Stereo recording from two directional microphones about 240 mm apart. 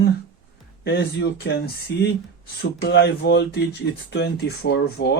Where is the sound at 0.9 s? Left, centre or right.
Left.